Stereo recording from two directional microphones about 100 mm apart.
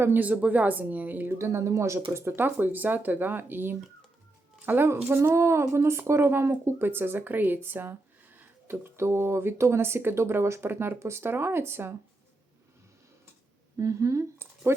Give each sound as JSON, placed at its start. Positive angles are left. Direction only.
{"t": 0.0, "sound": "speech", "side_deg": -20}
{"t": 13.7, "sound": "speech", "side_deg": -30}